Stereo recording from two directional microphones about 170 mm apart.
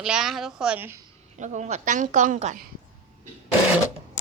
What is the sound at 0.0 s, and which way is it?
A child's voice, 5° right (ahead or behind).